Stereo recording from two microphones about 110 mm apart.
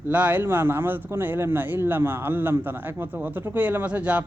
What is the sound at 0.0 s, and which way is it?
A man's voice, 15° right (ahead or behind).